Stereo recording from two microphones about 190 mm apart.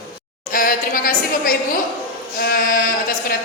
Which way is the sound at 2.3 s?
50° left (ahead or behind).